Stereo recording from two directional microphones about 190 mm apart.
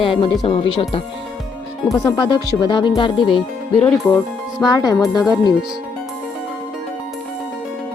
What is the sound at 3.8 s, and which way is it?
Speech, 5° left (ahead or behind).